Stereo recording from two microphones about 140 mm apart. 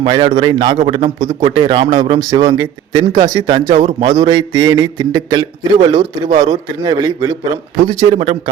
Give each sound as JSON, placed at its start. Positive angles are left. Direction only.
{"t": 0.0, "sound": "a man's voice", "side_deg": -35}